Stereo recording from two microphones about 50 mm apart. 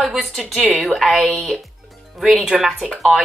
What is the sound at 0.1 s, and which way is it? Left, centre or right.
A woman's voice, centre.